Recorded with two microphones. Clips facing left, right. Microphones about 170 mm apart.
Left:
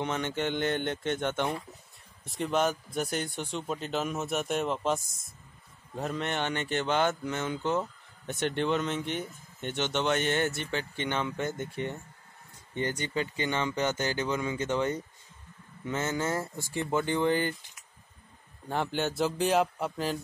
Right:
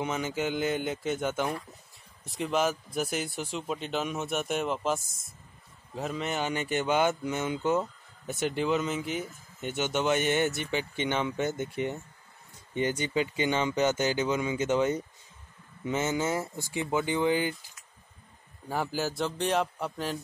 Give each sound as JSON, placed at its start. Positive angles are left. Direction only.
{"t": 0.0, "sound": "speech", "side_deg": -5}
{"t": 18.7, "sound": "speech", "side_deg": -5}